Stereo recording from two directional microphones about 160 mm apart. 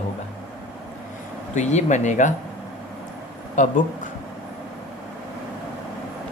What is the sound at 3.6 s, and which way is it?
Speech, 50° left (ahead or behind).